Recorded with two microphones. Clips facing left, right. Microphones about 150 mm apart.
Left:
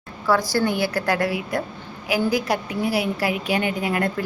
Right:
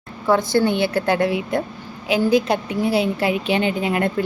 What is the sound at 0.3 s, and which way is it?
A woman's voice, 25° right (ahead or behind).